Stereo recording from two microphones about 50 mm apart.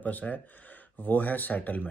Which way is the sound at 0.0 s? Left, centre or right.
Left.